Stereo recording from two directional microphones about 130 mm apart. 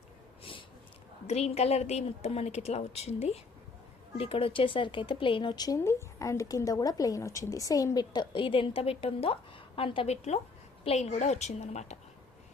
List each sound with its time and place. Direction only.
1.3 s a woman's voice: 55° left (ahead or behind)
10.8 s a woman's voice: 60° left (ahead or behind)